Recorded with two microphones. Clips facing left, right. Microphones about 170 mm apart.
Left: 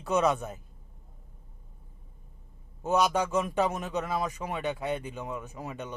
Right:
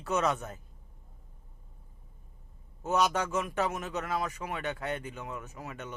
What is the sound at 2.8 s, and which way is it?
Speech, 10° left (ahead or behind).